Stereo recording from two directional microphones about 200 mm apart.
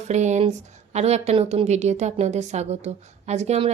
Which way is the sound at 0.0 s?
35° right (ahead or behind).